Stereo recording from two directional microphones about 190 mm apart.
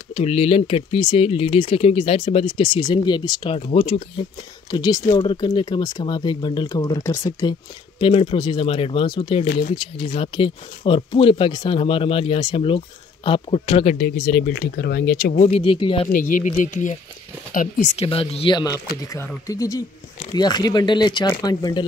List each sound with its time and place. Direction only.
0.1 s speech: 30° left (ahead or behind)
8.0 s speech: 30° left (ahead or behind)
13.9 s speech: 55° left (ahead or behind); by 16.1 s 30° left (ahead or behind)
16.1 s speech: 45° left (ahead or behind); by 21.8 s 20° left (ahead or behind)